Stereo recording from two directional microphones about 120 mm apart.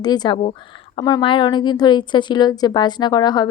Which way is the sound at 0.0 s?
35° left (ahead or behind).